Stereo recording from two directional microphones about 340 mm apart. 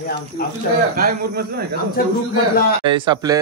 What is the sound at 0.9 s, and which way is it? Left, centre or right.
Speech, right.